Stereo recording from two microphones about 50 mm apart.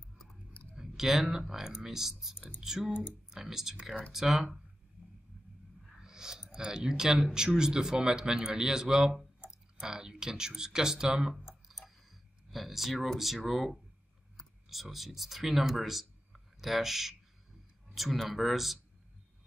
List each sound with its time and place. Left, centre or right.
0.7 s speech: centre
2.9 s speech: left
3.3 s speech: centre
5.9 s speech: centre
12.4 s speech: centre